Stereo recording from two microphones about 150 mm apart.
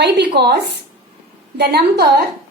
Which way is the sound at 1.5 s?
90° right.